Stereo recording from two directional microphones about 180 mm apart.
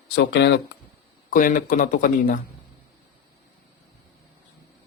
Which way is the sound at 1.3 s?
45° left (ahead or behind).